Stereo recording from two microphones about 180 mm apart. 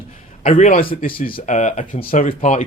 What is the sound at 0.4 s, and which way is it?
Speech, 40° left (ahead or behind).